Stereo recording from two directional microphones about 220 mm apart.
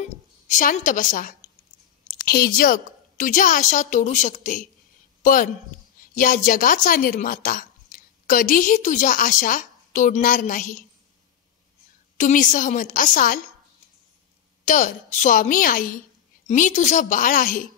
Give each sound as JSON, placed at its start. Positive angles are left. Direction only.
{"t": 0.5, "sound": "speech", "side_deg": 35}
{"t": 12.2, "sound": "speech", "side_deg": 35}
{"t": 14.6, "sound": "speech", "side_deg": 35}